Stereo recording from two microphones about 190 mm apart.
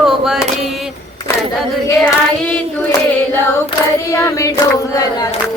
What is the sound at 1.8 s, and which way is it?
Child singing, 5° left (ahead or behind).